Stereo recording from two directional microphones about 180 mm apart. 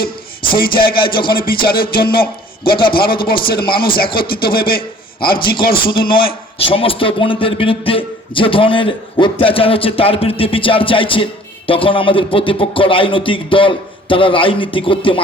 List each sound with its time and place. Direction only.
0.5 s music: 55° left (ahead or behind)
0.9 s a man's voice: 30° left (ahead or behind)
1.7 s music: 55° left (ahead or behind)
2.6 s a man's voice: 30° left (ahead or behind)
2.9 s music: 55° left (ahead or behind)
5.8 s a man's voice: 30° left (ahead or behind)